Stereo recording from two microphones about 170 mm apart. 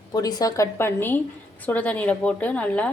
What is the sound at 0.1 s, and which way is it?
A woman's voice, 20° left (ahead or behind).